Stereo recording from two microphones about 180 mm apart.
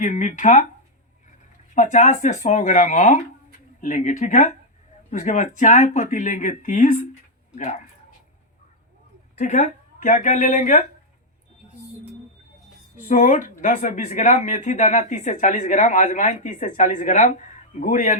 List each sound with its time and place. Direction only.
0.0 s speech: 45° left (ahead or behind)
1.7 s speech: 45° left (ahead or behind)
9.4 s speech: 45° left (ahead or behind)
13.0 s speech: 45° left (ahead or behind)